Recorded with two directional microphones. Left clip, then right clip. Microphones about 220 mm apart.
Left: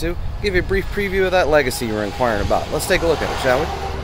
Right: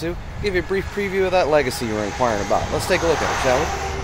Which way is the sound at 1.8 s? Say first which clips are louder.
Left 1 dB; 30° left (ahead or behind).